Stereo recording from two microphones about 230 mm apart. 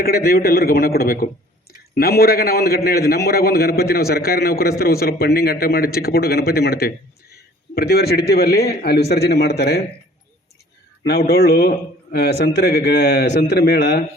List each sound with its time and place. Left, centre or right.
0.0 s a man's voice: left
11.0 s a man's voice: left